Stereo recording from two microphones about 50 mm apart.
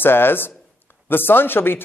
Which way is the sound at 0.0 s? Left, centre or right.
Left.